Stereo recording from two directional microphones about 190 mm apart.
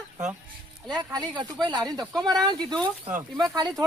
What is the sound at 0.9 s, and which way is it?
Speech, 20° right (ahead or behind).